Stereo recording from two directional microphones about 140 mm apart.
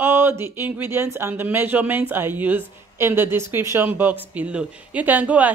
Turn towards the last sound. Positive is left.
turn(degrees=-10)  # may be behind; listen again after turning